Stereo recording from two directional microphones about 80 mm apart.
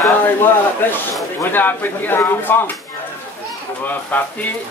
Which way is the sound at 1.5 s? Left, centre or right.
Left.